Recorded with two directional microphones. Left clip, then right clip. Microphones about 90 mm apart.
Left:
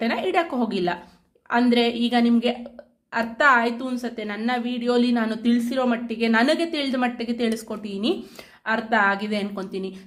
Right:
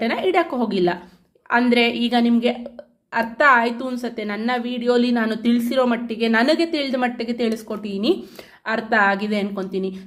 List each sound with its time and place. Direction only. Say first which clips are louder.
0.0 s a woman's voice: right 3 dB; 20° right (ahead or behind)
5.3 s speech: right 3 dB; 45° right (ahead or behind)
6.1 s a woman's voice: right 2 dB; 25° right (ahead or behind)